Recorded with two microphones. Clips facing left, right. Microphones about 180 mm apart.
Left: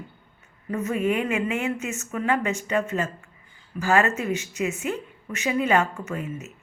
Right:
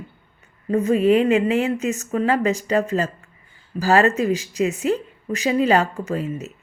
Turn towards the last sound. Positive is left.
turn(degrees=-35)  # may be behind; listen again after turning